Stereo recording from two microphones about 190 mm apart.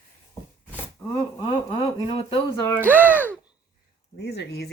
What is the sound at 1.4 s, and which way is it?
Speech, 25° left (ahead or behind).